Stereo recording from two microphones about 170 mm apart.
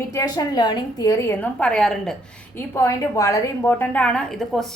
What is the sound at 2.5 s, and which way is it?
A woman's voice, 15° left (ahead or behind).